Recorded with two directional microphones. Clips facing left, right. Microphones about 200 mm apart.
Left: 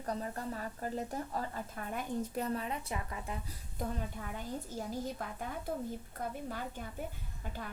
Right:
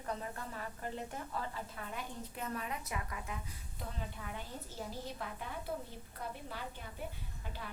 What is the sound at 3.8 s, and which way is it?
Speech, 45° left (ahead or behind).